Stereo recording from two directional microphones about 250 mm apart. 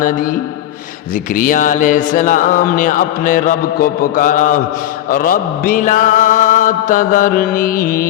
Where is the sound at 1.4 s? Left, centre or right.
Left.